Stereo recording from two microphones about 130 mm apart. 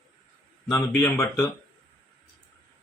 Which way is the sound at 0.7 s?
15° left (ahead or behind).